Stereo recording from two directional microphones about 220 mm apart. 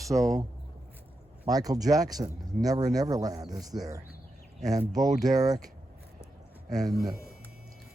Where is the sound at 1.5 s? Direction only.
15° right (ahead or behind).